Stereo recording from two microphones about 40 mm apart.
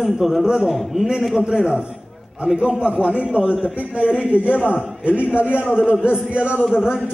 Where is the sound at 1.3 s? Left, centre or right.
Right.